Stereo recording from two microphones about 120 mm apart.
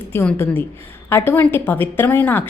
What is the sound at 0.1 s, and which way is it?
A woman's voice, 20° left (ahead or behind).